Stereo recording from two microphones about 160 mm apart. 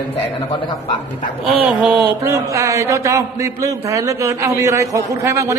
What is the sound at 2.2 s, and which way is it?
A man's voice, 20° right (ahead or behind).